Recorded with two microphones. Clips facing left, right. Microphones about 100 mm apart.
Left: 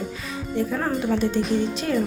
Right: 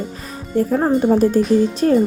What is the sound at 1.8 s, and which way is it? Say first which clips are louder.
Speech: right 10 dB; 40° right (ahead or behind).